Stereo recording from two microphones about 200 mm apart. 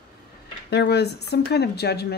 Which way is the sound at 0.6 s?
55° left (ahead or behind).